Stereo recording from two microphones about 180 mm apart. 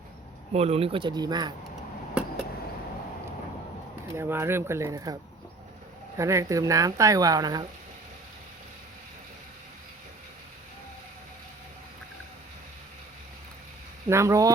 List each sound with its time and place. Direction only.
0.5 s speech: 35° right (ahead or behind)
4.1 s speech: 15° right (ahead or behind)
6.1 s speech: 15° right (ahead or behind)
14.1 s speech: 15° right (ahead or behind)